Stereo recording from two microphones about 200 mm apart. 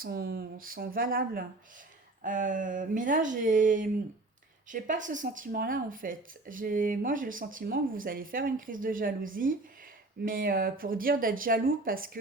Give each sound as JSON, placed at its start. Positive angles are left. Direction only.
{"t": 0.0, "sound": "speech", "side_deg": -50}